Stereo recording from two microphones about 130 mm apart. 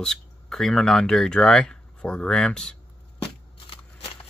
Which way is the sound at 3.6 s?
45° left (ahead or behind).